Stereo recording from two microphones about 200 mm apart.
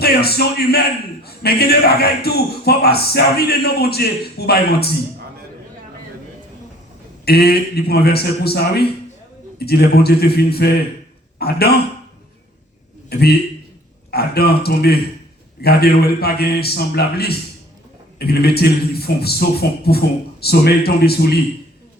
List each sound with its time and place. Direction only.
0.0 s a man's voice: 50° left (ahead or behind)
7.3 s a man's voice: 50° left (ahead or behind)
13.1 s a man's voice: 50° left (ahead or behind)